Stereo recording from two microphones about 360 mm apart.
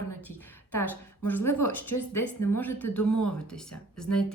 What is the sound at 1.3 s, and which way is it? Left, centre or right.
A woman's voice, centre.